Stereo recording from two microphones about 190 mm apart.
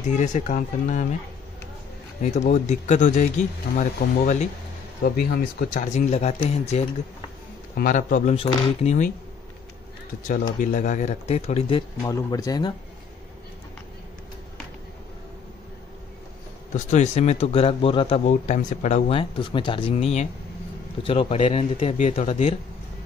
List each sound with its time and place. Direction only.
0.0 s speech: 40° left (ahead or behind)
2.2 s speech: 35° left (ahead or behind)
5.0 s a man's voice: 50° left (ahead or behind)
10.6 s speech: 40° left (ahead or behind)
12.1 s speech: 20° left (ahead or behind)
16.7 s speech: 40° left (ahead or behind)